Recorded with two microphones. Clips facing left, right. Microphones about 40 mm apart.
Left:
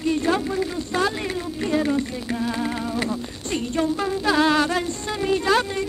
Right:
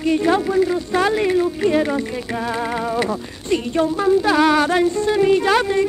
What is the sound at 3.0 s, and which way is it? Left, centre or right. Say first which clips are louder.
Speech: right 6 dB; right.